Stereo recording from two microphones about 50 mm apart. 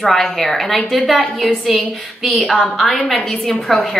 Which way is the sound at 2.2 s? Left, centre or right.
Centre.